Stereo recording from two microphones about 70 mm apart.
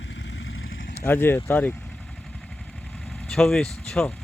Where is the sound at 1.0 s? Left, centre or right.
Left.